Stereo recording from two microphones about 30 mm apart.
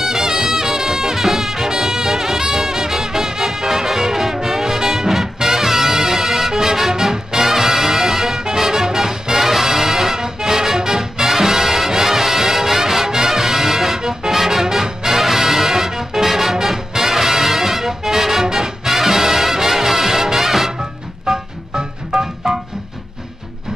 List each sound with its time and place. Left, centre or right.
0.0 s brass instrument: centre
2.0 s music: centre
13.9 s music: centre
14.3 s music: centre
21.3 s music: right